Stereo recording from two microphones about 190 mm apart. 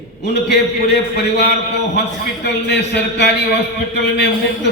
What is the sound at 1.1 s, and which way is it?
A man's voice, 60° left (ahead or behind).